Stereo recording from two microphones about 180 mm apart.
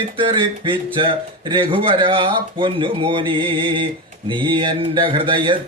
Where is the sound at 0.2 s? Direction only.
30° right (ahead or behind).